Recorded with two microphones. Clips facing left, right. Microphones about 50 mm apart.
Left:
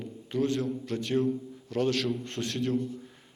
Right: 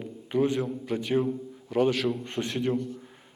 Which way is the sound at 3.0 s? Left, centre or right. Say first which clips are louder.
Even; centre.